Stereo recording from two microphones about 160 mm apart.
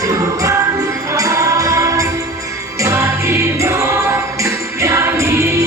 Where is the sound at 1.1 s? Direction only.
20° right (ahead or behind).